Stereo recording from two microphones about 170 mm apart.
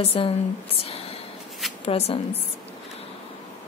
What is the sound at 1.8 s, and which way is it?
Speech, 35° left (ahead or behind).